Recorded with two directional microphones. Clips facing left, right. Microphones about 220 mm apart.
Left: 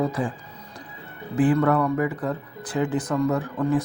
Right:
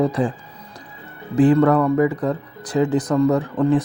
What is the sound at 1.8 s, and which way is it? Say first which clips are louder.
Speech: right 6 dB; 40° right (ahead or behind).